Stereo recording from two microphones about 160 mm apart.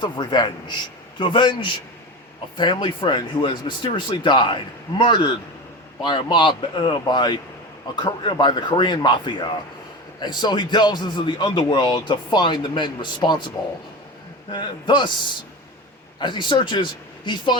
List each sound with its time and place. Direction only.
0.0 s a man's voice: 30° left (ahead or behind)
14.5 s a man's voice: 30° left (ahead or behind)
16.2 s a man's voice: 30° left (ahead or behind)